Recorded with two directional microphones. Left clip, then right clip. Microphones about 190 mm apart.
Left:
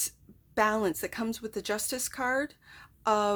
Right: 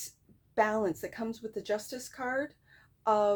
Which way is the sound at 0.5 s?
35° left (ahead or behind).